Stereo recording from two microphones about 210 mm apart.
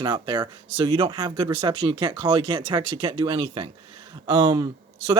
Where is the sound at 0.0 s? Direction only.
20° right (ahead or behind).